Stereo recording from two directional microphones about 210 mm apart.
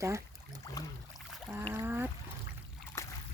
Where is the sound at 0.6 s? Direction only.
15° left (ahead or behind).